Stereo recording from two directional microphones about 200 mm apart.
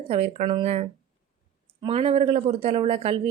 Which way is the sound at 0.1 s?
30° right (ahead or behind).